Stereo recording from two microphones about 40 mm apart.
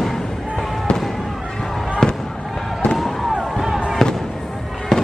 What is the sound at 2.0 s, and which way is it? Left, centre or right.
Fireworks, centre.